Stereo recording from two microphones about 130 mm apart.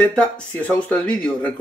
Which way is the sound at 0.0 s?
10° left (ahead or behind).